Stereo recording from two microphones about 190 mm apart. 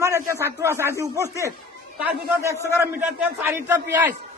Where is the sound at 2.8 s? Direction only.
10° right (ahead or behind).